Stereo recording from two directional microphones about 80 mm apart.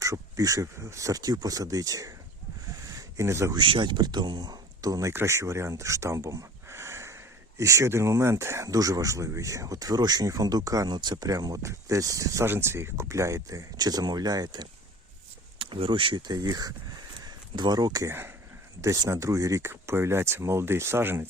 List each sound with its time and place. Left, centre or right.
0.0 s speech: right
2.8 s a sound: right
3.5 s speech: right
10.8 s speech: right
12.5 s speech: right
15.5 s speech: right
18.8 s speech: right